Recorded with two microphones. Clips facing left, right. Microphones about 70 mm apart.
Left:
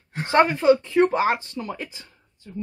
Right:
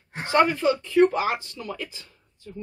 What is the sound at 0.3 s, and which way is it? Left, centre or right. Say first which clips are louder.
Speech: left 3 dB; left.